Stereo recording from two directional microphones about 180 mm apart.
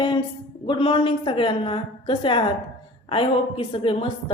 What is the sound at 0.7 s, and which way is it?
Speech, 30° left (ahead or behind).